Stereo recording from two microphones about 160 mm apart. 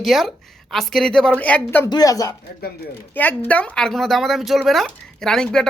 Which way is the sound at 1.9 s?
25° left (ahead or behind).